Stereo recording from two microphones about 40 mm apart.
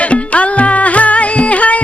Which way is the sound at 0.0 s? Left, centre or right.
Left.